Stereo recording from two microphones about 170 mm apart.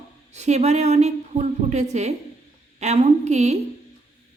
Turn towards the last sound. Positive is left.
turn(degrees=-40)  # may be behind; listen again after turning